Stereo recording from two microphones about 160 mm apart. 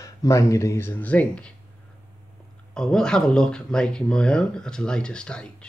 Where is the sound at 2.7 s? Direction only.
5° left (ahead or behind).